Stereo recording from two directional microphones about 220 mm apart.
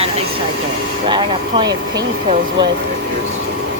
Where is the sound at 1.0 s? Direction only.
20° right (ahead or behind).